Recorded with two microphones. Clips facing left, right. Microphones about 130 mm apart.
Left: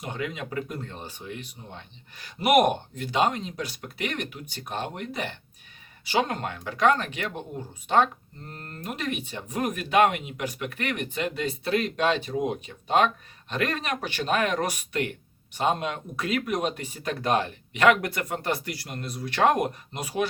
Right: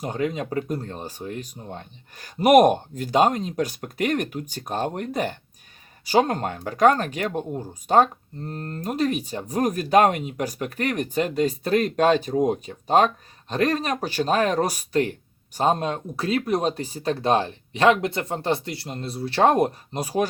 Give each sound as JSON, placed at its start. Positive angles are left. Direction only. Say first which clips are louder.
{"t": 0.0, "sound": "speech", "louder": "right 7 dB", "side_deg": -40}